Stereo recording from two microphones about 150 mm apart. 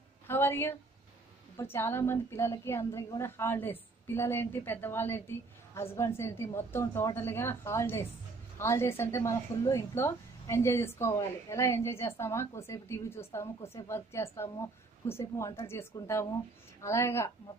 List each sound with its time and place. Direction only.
0.3 s a woman's voice: 15° left (ahead or behind)